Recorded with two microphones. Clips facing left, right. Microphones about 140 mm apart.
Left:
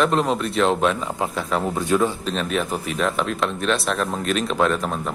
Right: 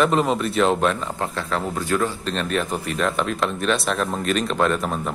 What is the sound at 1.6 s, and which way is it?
Speech, 20° left (ahead or behind).